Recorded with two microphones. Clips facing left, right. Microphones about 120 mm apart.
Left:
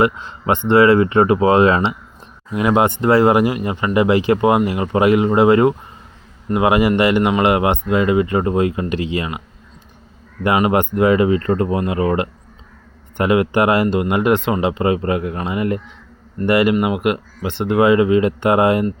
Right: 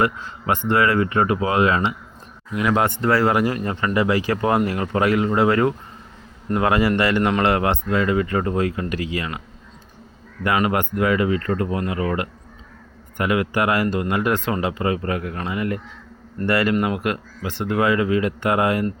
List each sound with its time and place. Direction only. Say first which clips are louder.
0.0 s speech: left 4 dB; 25° left (ahead or behind)
10.4 s speech: left 5 dB; 25° left (ahead or behind)